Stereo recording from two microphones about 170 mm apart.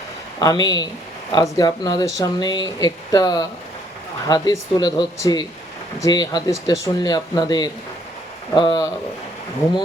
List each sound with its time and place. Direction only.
0.3 s speech: 25° left (ahead or behind)